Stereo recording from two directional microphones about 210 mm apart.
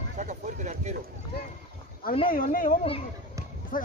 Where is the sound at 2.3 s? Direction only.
40° left (ahead or behind).